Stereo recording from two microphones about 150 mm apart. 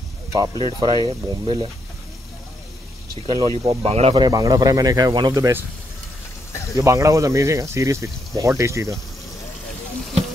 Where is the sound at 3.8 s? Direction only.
40° right (ahead or behind).